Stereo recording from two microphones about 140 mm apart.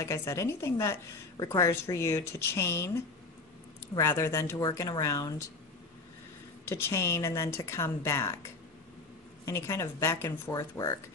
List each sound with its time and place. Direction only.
0.0 s speech: 20° left (ahead or behind)
6.7 s speech: 20° left (ahead or behind)
9.5 s speech: 20° left (ahead or behind)